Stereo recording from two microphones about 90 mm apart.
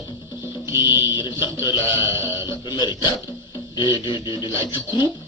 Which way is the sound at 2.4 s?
55° left (ahead or behind).